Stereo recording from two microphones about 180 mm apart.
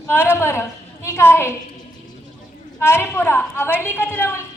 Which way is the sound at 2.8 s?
15° left (ahead or behind).